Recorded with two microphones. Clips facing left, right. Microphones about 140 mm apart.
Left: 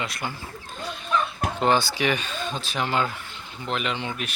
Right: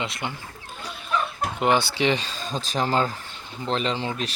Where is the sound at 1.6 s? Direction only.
20° right (ahead or behind).